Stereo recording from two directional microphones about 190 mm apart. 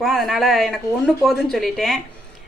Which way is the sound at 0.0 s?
Centre (ahead or behind).